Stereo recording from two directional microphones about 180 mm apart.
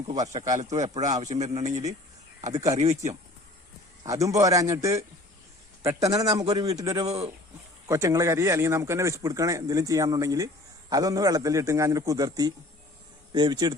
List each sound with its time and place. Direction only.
0.1 s a man's voice: 20° right (ahead or behind)
0.9 s a man's voice: 40° right (ahead or behind)
4.0 s a man's voice: 15° right (ahead or behind)